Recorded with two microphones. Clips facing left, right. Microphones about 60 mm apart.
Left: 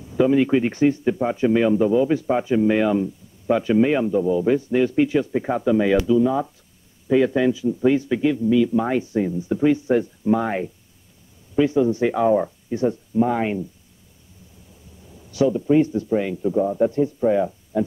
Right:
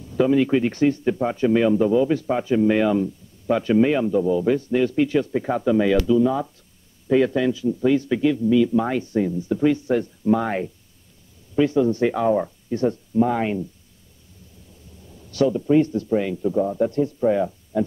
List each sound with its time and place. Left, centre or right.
0.2 s a man's voice: centre
7.3 s speech: centre
15.3 s speech: centre
17.2 s speech: centre
17.7 s music: centre